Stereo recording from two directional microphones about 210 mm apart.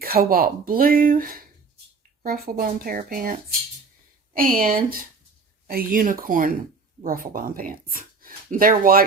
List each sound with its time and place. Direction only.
0.0 s speech: 45° right (ahead or behind)
4.4 s speech: 45° right (ahead or behind)